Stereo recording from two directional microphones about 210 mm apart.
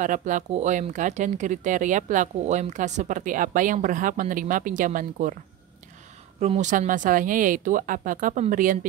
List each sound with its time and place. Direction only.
0.0 s speech: 35° right (ahead or behind)
6.4 s speech: 35° right (ahead or behind)